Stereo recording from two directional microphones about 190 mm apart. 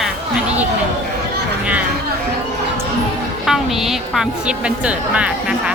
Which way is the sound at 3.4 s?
Centre (ahead or behind).